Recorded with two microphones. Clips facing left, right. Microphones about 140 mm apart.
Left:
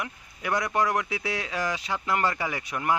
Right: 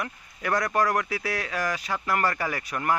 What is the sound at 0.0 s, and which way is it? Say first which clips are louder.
A man's voice: right 2 dB; 20° left (ahead or behind).